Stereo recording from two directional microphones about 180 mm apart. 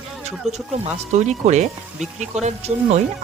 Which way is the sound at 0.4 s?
40° right (ahead or behind).